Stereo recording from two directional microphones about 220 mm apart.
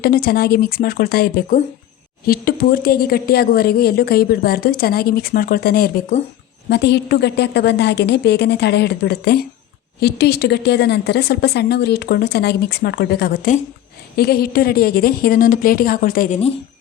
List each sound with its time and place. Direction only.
0.0 s a woman's voice: 45° left (ahead or behind)